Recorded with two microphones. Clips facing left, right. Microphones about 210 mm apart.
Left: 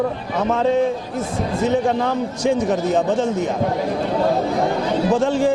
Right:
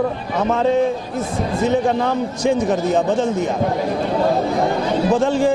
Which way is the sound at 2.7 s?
30° right (ahead or behind).